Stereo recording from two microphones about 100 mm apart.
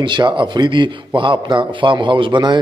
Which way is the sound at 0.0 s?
55° right (ahead or behind).